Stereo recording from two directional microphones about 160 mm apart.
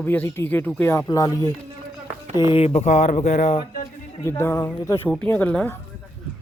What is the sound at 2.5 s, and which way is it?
Speech, 35° left (ahead or behind).